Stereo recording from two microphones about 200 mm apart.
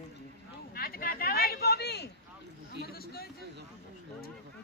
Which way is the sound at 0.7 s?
50° left (ahead or behind).